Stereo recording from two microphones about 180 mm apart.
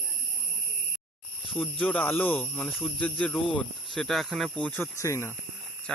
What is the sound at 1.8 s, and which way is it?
Speech, 10° left (ahead or behind).